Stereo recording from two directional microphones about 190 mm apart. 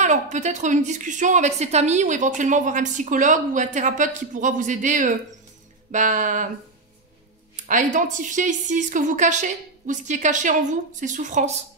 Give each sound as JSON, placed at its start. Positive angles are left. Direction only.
{"t": 0.0, "sound": "a woman's voice", "side_deg": -40}
{"t": 7.5, "sound": "a woman's voice", "side_deg": -40}